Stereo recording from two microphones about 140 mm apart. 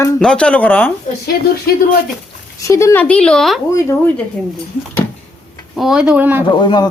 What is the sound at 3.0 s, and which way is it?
Speech, 5° left (ahead or behind).